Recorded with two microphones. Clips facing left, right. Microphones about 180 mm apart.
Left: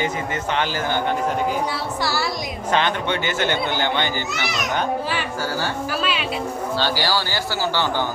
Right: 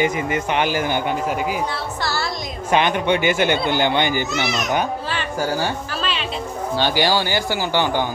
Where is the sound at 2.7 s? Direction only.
15° right (ahead or behind).